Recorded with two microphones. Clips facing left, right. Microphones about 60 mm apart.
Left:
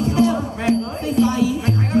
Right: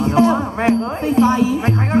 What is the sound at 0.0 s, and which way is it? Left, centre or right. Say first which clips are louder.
Music: right 3 dB; right.